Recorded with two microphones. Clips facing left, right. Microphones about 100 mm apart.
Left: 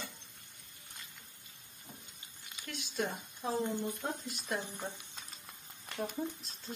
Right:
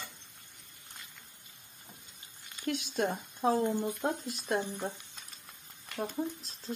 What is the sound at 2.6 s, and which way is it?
Speech, 50° right (ahead or behind).